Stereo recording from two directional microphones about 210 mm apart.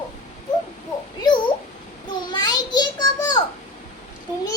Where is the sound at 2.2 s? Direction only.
20° left (ahead or behind).